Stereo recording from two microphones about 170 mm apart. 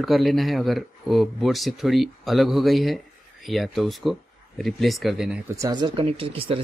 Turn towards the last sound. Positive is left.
turn(degrees=-30)  # may be behind; listen again after turning